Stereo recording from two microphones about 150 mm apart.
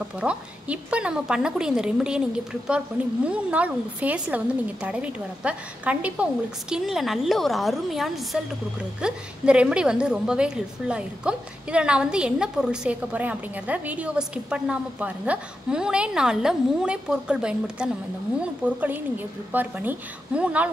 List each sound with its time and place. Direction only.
0.2 s a woman's voice: 10° right (ahead or behind)
3.3 s a woman's voice: 10° right (ahead or behind)